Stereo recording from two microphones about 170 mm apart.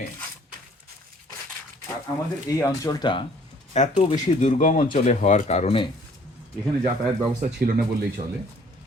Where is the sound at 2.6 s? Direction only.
20° left (ahead or behind); by 4.1 s 35° left (ahead or behind).